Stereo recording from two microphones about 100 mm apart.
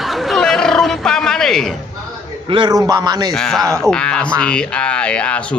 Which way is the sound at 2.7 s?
40° right (ahead or behind).